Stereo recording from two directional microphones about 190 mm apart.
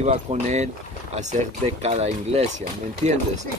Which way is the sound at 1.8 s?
35° right (ahead or behind).